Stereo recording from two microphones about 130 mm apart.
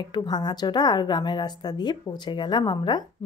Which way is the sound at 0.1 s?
35° left (ahead or behind).